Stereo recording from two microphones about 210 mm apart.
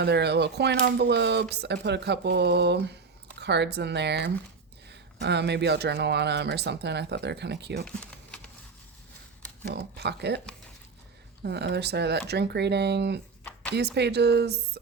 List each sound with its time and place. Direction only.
0.0 s speech: 50° right (ahead or behind)
7.9 s typing: 5° left (ahead or behind)
9.6 s speech: 50° right (ahead or behind)
11.4 s speech: 50° right (ahead or behind)
13.4 s a sound: 5° left (ahead or behind)
13.7 s speech: 50° right (ahead or behind)